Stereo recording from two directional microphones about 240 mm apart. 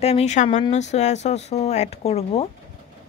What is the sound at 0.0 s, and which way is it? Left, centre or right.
Speech, left.